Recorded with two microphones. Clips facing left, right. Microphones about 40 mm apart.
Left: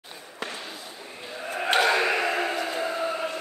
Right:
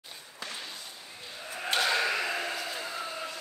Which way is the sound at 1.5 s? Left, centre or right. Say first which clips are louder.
Left 6 dB; left.